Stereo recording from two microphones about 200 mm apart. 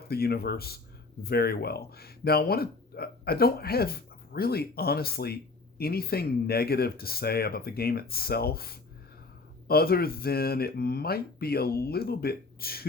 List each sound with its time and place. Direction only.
0.1 s speech: 50° left (ahead or behind)